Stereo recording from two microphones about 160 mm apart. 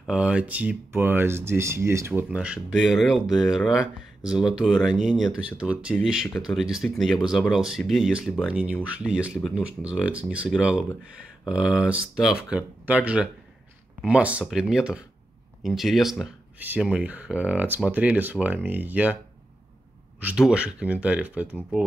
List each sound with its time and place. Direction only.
0.0 s speech: 5° right (ahead or behind)
20.2 s speech: 5° right (ahead or behind)